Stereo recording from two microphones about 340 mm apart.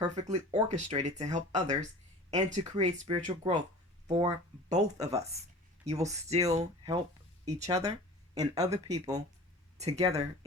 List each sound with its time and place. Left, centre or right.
0.0 s speech: centre
4.0 s speech: centre